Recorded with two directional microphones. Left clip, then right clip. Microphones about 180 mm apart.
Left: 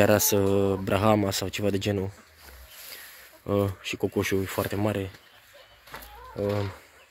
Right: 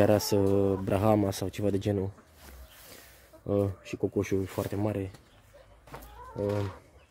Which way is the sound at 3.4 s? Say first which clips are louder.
Left 3 dB; centre (ahead or behind).